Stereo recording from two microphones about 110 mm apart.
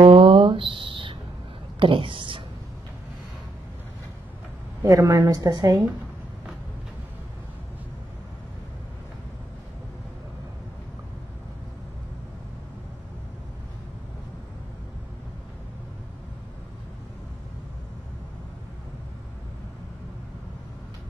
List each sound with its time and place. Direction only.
0.0 s a sound: 55° right (ahead or behind)
1.8 s a woman's voice: 50° right (ahead or behind)
4.8 s a woman's voice: 30° right (ahead or behind)